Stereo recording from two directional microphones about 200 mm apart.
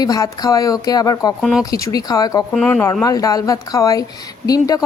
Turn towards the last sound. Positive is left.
turn(degrees=20)  # may be behind; listen again after turning